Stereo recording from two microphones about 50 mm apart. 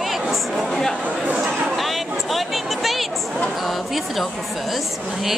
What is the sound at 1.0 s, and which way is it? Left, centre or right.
Speech, right.